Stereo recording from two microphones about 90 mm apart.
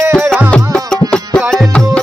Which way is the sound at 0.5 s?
5° left (ahead or behind).